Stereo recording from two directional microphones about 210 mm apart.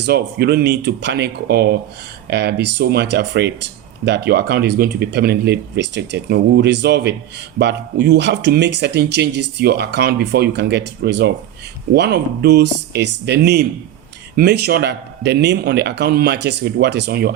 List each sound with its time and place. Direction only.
0.0 s speech: 50° right (ahead or behind)